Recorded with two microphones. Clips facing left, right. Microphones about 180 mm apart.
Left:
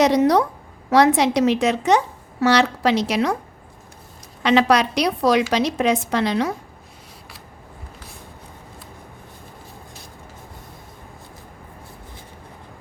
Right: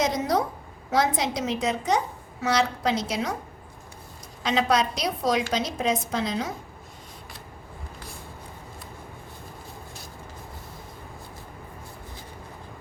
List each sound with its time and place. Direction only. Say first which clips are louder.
0.0 s a woman's voice: left 8 dB; 75° left (ahead or behind)
4.4 s a woman's voice: left 6 dB; 75° left (ahead or behind)